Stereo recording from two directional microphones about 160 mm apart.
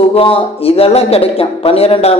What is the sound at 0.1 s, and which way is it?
Speech, 35° left (ahead or behind).